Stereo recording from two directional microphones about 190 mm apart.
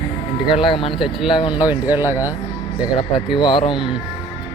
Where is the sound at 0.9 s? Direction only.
Centre (ahead or behind).